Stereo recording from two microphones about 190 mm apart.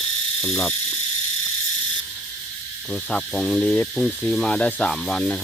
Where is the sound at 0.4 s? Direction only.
5° left (ahead or behind).